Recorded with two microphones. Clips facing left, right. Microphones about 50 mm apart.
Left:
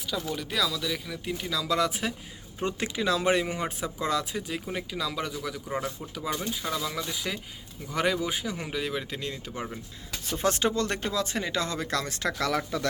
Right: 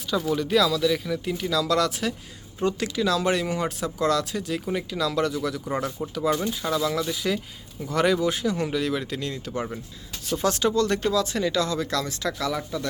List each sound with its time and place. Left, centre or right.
0.3 s speech: centre
6.0 s speech: centre
10.2 s speech: left
12.5 s speech: left